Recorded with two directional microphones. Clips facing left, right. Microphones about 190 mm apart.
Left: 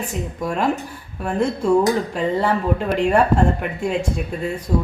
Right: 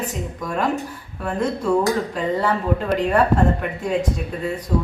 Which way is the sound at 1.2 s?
25° left (ahead or behind).